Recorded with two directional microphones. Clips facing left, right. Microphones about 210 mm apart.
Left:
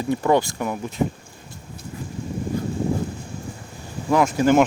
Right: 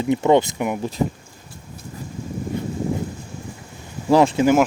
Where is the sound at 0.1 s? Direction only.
20° right (ahead or behind).